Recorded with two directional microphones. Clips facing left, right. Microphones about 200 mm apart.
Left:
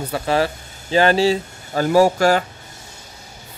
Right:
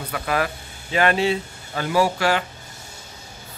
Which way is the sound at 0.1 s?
30° left (ahead or behind).